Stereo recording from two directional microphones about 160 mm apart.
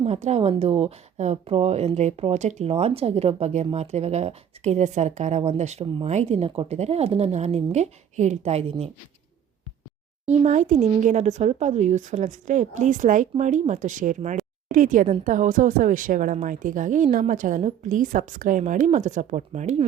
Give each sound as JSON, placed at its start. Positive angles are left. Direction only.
{"t": 0.0, "sound": "a woman's voice", "side_deg": -45}
{"t": 10.2, "sound": "a woman's voice", "side_deg": -50}